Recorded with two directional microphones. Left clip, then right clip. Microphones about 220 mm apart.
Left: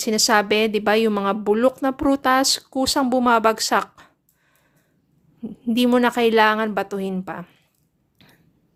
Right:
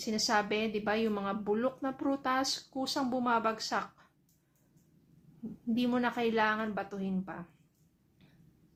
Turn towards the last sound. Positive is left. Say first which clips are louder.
# left 12 dB
turn(degrees=45)  # may be behind; listen again after turning